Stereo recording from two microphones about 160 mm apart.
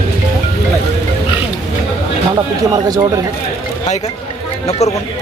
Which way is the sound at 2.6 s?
25° right (ahead or behind).